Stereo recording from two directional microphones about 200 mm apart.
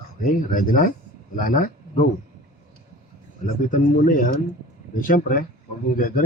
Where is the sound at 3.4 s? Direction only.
40° left (ahead or behind).